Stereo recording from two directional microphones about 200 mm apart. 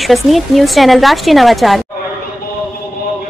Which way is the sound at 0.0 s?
Centre (ahead or behind).